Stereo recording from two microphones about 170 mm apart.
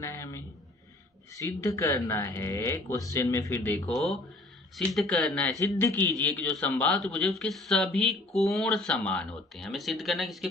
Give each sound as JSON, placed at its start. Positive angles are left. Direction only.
{"t": 0.0, "sound": "a man's voice", "side_deg": 15}
{"t": 3.9, "sound": "a man's voice", "side_deg": 0}